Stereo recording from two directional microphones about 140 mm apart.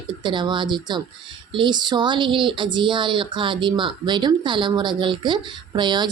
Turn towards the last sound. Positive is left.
turn(degrees=-35)  # may be behind; listen again after turning